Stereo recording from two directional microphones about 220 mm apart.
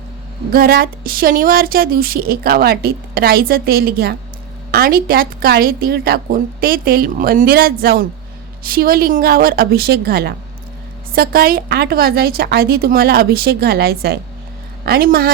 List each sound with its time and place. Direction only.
0.5 s a woman's voice: 40° right (ahead or behind)